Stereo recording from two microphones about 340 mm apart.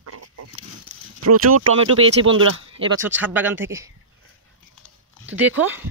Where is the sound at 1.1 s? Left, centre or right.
Right.